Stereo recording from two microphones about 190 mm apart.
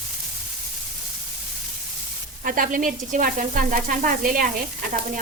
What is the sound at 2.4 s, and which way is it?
Speech, 45° right (ahead or behind).